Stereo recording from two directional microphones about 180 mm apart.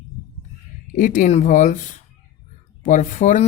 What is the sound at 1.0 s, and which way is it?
Speech, 45° left (ahead or behind).